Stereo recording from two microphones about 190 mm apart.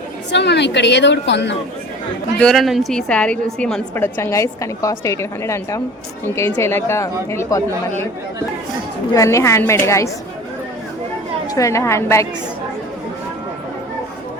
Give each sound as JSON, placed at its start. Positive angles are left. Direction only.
{"t": 0.3, "sound": "speech", "side_deg": 65}
{"t": 2.4, "sound": "a woman's voice", "side_deg": 0}
{"t": 9.1, "sound": "a woman's voice", "side_deg": 15}
{"t": 11.5, "sound": "a woman's voice", "side_deg": 15}